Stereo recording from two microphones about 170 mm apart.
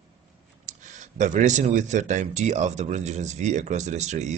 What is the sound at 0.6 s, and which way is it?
Speech, 45° right (ahead or behind).